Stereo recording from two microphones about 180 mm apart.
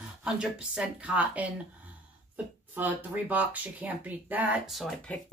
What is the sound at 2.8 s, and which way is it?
Speech, 10° right (ahead or behind).